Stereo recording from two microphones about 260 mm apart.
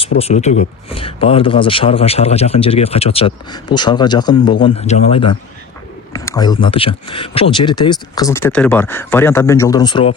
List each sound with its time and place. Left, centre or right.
0.2 s speech: left